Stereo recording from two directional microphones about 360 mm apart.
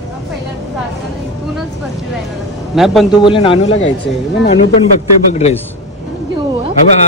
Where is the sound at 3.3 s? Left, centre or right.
Centre.